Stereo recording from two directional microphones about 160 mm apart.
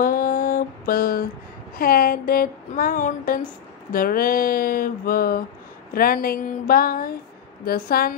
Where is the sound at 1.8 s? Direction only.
65° left (ahead or behind).